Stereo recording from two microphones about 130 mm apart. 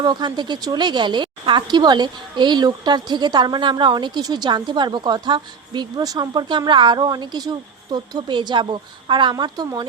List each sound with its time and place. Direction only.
0.0 s a woman's voice: 35° right (ahead or behind)